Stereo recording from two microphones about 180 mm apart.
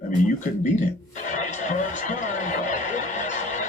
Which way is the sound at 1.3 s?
45° left (ahead or behind).